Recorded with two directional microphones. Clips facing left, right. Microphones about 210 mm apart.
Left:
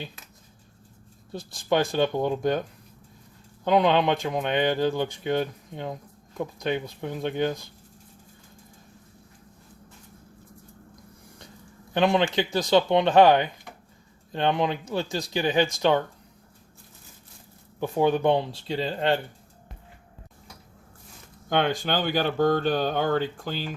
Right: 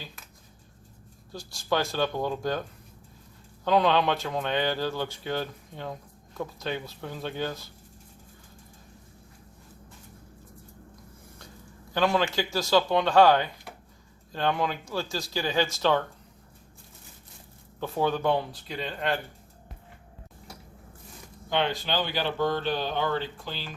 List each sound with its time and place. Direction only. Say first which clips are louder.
1.5 s speech: left 4 dB; 20° left (ahead or behind)
11.9 s speech: left 3 dB; 20° left (ahead or behind)
17.7 s speech: left 5 dB; 15° left (ahead or behind); by 19.2 s 30° left (ahead or behind)
21.5 s speech: left 3 dB; 50° left (ahead or behind)